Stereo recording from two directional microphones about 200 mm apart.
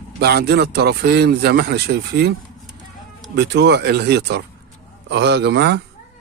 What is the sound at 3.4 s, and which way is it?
A man's voice, 60° right (ahead or behind).